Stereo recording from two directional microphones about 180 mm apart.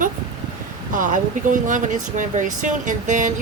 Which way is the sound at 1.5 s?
45° right (ahead or behind).